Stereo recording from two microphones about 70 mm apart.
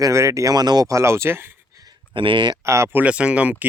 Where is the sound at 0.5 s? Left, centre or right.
Right.